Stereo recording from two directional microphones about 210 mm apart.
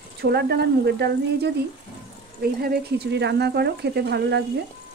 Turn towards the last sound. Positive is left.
turn(degrees=-50)  # may be behind; listen again after turning